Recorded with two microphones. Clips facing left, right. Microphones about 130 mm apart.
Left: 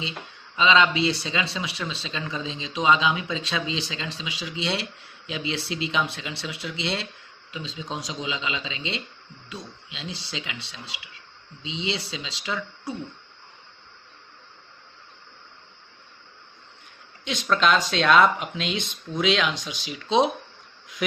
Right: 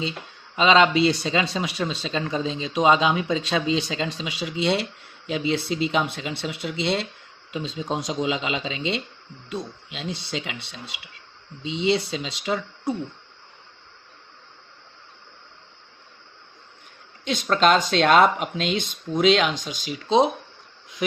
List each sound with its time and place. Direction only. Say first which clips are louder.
0.5 s speech: right 3 dB; 50° right (ahead or behind)
17.2 s speech: right 3 dB; 45° right (ahead or behind)